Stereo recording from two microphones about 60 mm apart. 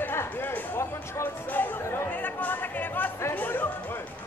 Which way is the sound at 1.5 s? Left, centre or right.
Left.